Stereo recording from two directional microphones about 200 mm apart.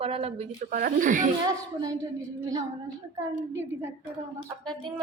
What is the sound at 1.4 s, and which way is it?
Speech, 20° right (ahead or behind).